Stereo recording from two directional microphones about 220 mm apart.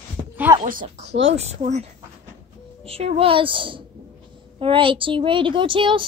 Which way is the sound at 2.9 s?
25° right (ahead or behind).